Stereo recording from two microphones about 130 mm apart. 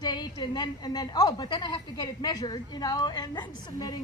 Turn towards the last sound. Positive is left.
turn(degrees=30)  # may be behind; listen again after turning